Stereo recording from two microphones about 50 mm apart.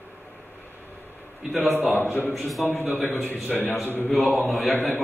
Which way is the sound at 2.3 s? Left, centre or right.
Centre.